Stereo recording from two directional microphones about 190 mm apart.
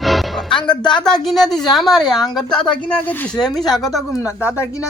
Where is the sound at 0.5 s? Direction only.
25° left (ahead or behind).